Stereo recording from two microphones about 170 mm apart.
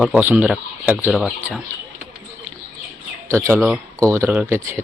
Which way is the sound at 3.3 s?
15° right (ahead or behind).